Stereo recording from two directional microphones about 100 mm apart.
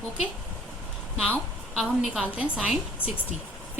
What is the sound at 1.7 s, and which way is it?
A woman's voice, 5° right (ahead or behind).